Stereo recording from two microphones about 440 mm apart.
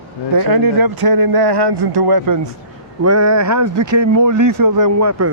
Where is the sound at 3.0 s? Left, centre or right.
Right.